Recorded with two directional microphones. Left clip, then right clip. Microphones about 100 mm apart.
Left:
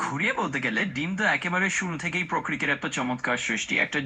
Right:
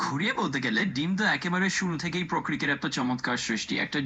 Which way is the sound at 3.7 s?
Centre (ahead or behind).